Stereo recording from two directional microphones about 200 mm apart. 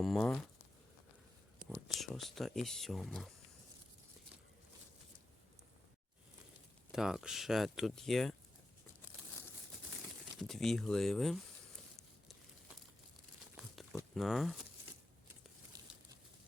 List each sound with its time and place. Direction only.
0.0 s speech: centre (ahead or behind)
1.9 s speech: centre (ahead or behind)
6.9 s speech: centre (ahead or behind)
10.3 s speech: centre (ahead or behind)
11.9 s crumpling: centre (ahead or behind)
14.2 s speech: centre (ahead or behind)